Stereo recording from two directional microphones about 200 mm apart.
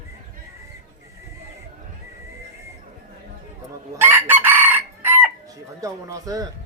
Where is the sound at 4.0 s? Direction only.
10° right (ahead or behind).